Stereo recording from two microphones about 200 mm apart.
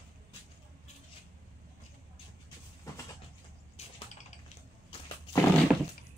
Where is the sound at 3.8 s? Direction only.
30° left (ahead or behind).